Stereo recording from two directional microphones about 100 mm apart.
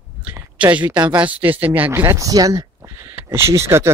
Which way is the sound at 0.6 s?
15° right (ahead or behind).